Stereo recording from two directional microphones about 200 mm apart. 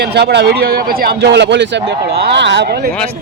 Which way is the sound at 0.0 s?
55° right (ahead or behind).